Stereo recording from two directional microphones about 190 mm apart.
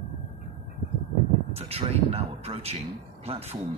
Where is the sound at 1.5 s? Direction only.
30° right (ahead or behind).